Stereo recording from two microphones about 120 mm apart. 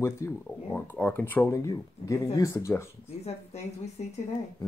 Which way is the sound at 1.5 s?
25° left (ahead or behind).